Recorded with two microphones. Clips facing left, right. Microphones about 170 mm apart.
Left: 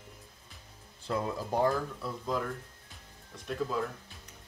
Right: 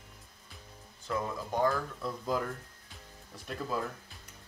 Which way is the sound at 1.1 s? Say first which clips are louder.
Left 2 dB; 30° left (ahead or behind).